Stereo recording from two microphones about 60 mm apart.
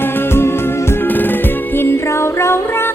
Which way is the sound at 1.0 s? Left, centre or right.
Left.